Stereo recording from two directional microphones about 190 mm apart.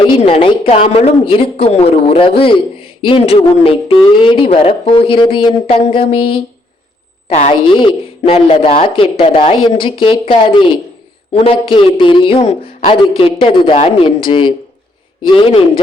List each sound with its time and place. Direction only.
0.0 s speech: 25° left (ahead or behind)